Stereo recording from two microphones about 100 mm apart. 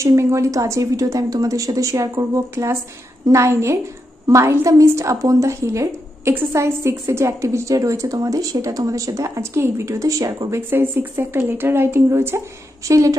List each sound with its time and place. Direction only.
0.0 s a woman's voice: 30° right (ahead or behind)
10.7 s speech: 20° right (ahead or behind)